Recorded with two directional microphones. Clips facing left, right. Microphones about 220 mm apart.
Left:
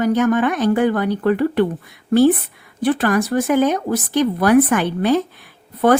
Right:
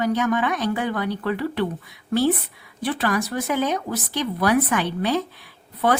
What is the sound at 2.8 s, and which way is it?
Speech, 50° left (ahead or behind).